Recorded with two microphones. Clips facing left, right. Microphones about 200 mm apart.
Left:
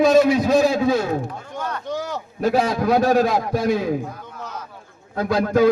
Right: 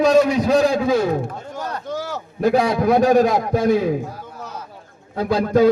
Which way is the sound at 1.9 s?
5° right (ahead or behind).